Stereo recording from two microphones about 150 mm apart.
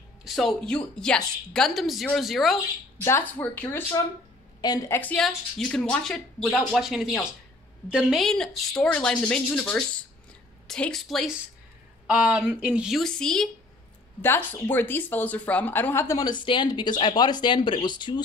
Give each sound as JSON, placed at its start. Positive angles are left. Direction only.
{"t": 0.2, "sound": "speech", "side_deg": 0}
{"t": 3.0, "sound": "a woman's voice", "side_deg": 15}
{"t": 4.6, "sound": "a woman's voice", "side_deg": 25}